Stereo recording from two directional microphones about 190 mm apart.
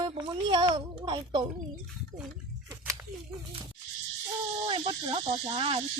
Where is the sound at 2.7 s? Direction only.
15° right (ahead or behind).